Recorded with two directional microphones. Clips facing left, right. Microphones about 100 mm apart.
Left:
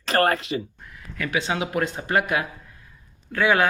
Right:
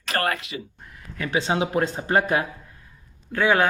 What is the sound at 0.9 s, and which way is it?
A man's voice, 30° right (ahead or behind).